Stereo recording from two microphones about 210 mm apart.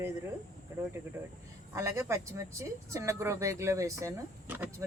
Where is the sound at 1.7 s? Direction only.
15° right (ahead or behind).